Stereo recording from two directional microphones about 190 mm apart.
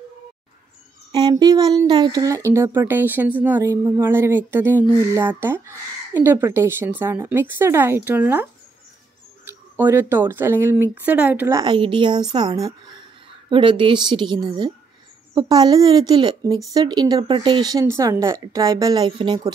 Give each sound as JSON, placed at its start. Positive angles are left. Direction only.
{"t": 1.1, "sound": "a woman's voice", "side_deg": -20}